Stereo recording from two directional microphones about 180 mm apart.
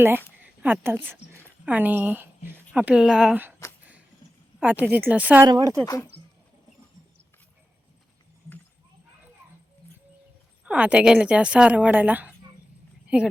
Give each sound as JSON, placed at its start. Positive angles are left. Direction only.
{"t": 0.4, "sound": "a woman's voice", "side_deg": -10}
{"t": 4.6, "sound": "a woman's voice", "side_deg": -10}
{"t": 5.5, "sound": "speech", "side_deg": -25}
{"t": 10.7, "sound": "a woman's voice", "side_deg": -5}